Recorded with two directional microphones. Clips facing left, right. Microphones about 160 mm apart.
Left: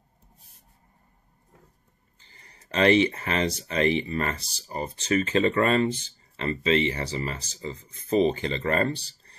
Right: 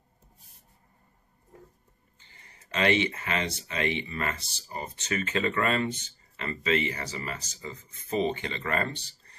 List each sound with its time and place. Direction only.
2.1 s speech: 35° left (ahead or behind)